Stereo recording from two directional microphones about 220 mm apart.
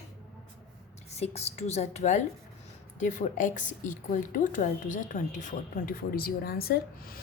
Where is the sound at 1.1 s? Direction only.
30° left (ahead or behind).